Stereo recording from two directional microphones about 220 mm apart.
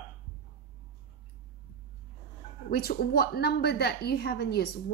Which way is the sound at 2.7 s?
45° left (ahead or behind).